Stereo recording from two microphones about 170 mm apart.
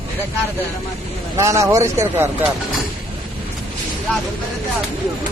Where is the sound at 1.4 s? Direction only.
20° right (ahead or behind).